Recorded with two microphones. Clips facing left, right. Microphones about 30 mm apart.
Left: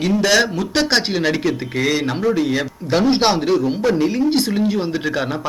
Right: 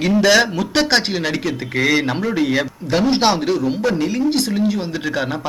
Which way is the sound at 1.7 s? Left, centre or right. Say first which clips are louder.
Right 6 dB; centre.